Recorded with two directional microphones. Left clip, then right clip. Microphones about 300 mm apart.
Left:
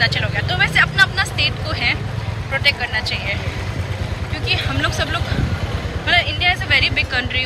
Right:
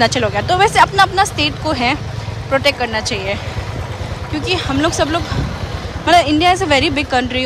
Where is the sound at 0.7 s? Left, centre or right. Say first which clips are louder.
Right 4 dB; centre.